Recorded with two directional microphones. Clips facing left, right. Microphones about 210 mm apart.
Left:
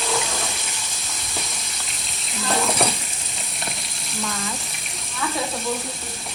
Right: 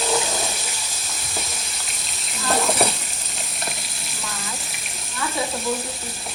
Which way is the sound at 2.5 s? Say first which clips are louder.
Right 1 dB; centre (ahead or behind).